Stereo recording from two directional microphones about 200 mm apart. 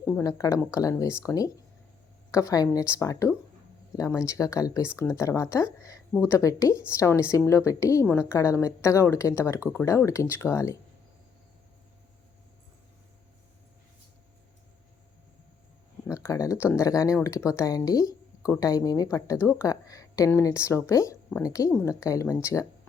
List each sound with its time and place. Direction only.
0.0 s speech: 15° left (ahead or behind)
16.0 s speech: 15° left (ahead or behind)